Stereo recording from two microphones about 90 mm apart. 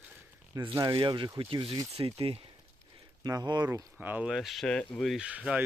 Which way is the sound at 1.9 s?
90° right.